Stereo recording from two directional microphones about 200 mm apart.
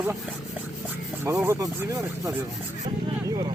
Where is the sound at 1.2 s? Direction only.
15° right (ahead or behind).